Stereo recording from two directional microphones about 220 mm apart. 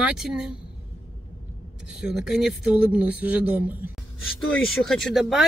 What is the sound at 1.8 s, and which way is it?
Speech, 5° right (ahead or behind).